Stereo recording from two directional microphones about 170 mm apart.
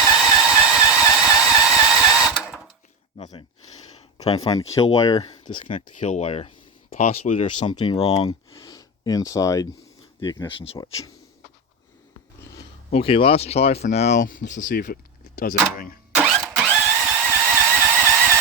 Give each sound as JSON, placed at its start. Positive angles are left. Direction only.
{"t": 0.0, "sound": "a sound", "side_deg": -5}
{"t": 4.5, "sound": "speech", "side_deg": 20}
{"t": 6.0, "sound": "speech", "side_deg": 45}
{"t": 10.8, "sound": "speech", "side_deg": 20}
{"t": 12.9, "sound": "speech", "side_deg": 35}
{"t": 14.4, "sound": "speech", "side_deg": 90}
{"t": 14.7, "sound": "speech", "side_deg": 55}
{"t": 16.1, "sound": "engine", "side_deg": -10}
{"t": 17.0, "sound": "a sound", "side_deg": -10}